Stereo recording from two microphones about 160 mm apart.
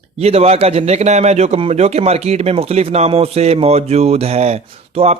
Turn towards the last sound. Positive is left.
turn(degrees=-40)  # may be behind; listen again after turning